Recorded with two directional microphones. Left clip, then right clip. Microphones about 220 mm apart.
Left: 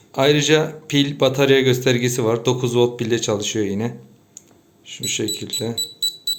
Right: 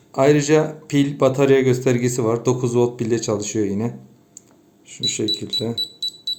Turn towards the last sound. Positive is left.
turn(degrees=-15)  # may be behind; listen again after turning